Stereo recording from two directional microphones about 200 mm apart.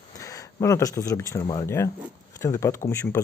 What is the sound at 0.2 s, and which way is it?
Speech, 15° left (ahead or behind).